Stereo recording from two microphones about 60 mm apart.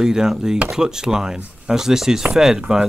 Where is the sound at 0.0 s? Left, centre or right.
Centre.